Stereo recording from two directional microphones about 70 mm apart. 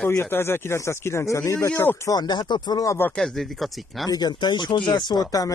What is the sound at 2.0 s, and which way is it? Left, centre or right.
Speech, left.